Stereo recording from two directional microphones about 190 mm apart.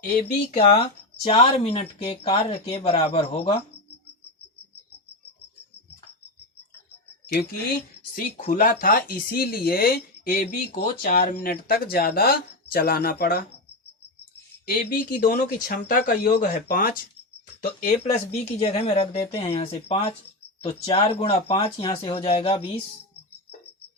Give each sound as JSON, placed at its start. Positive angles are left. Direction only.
{"t": 0.5, "sound": "speech", "side_deg": 30}
{"t": 8.1, "sound": "speech", "side_deg": 50}
{"t": 14.8, "sound": "speech", "side_deg": 55}